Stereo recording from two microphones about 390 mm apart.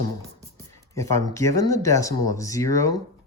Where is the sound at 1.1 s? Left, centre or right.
Centre.